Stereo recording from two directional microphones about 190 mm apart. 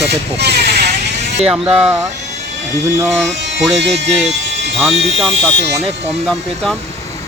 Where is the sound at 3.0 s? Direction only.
5° right (ahead or behind).